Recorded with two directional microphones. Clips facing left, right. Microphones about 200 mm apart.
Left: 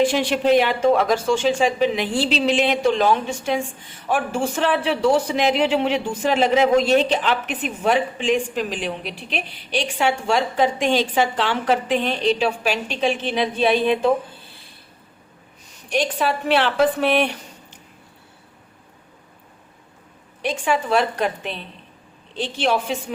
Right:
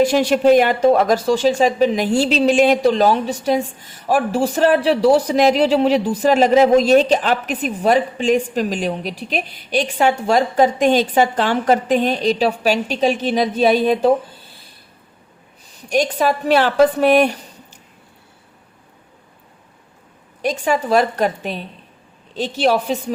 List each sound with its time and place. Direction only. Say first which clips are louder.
0.0 s a woman's voice: right 5 dB; 40° right (ahead or behind)
15.9 s a woman's voice: right 4 dB; 40° right (ahead or behind)
20.4 s a woman's voice: right 3 dB; 40° right (ahead or behind)